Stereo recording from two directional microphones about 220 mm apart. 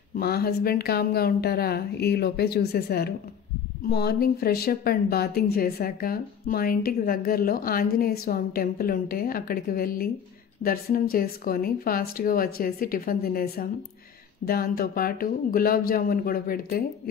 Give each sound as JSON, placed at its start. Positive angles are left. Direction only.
{"t": 0.2, "sound": "speech", "side_deg": 45}